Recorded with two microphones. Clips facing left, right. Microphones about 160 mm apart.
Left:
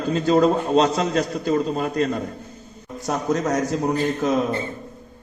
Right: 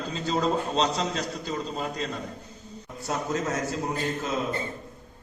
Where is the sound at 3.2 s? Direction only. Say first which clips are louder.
Left 8 dB; 40° left (ahead or behind).